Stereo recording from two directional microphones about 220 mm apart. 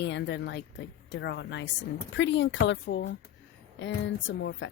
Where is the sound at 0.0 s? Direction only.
50° left (ahead or behind).